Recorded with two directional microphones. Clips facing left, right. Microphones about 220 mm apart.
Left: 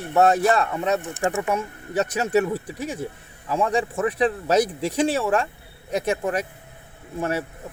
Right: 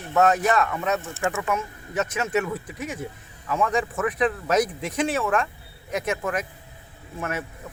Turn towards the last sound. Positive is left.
turn(degrees=35)  # may be behind; listen again after turning